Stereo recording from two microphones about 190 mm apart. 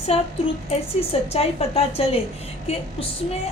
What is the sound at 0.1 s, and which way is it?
Speech, 30° left (ahead or behind).